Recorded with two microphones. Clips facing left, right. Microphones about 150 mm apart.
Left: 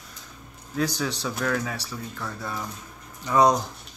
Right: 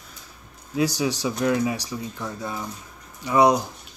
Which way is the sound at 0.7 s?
10° right (ahead or behind).